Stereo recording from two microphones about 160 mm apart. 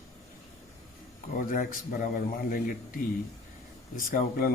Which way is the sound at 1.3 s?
60° left (ahead or behind).